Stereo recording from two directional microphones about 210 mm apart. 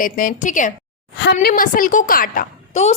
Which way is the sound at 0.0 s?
40° left (ahead or behind).